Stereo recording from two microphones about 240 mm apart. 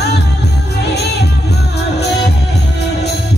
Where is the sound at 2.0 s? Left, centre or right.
Left.